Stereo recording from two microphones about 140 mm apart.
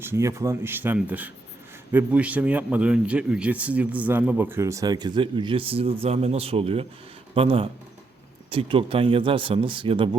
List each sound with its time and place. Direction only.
0.0 s a man's voice: 20° right (ahead or behind); by 10.1 s 40° right (ahead or behind)